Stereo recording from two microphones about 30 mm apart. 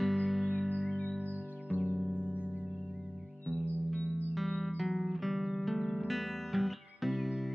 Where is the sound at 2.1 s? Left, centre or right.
Right.